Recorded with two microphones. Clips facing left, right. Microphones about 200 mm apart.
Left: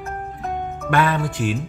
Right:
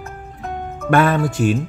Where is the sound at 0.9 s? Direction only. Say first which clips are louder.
Right 5 dB; 45° right (ahead or behind).